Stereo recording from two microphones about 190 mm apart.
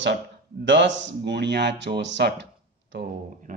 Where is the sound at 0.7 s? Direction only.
70° right (ahead or behind).